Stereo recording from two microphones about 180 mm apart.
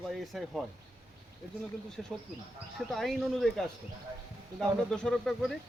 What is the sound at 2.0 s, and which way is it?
Speech, centre (ahead or behind).